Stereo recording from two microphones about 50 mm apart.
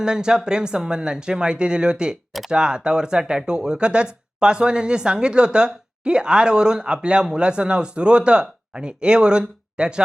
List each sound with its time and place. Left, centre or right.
0.0 s speech: centre